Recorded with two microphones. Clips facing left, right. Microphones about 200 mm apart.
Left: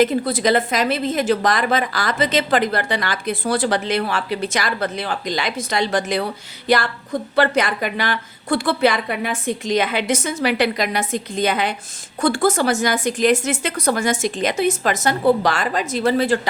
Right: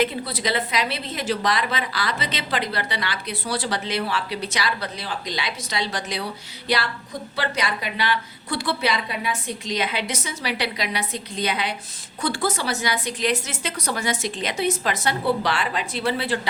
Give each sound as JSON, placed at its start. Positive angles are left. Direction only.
{"t": 0.0, "sound": "a woman's voice", "side_deg": 45}